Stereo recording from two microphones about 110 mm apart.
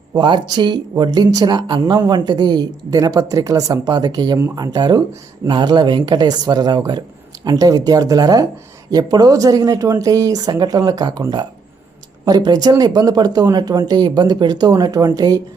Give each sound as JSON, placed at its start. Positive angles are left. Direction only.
{"t": 0.2, "sound": "speech", "side_deg": -45}
{"t": 12.2, "sound": "speech", "side_deg": -40}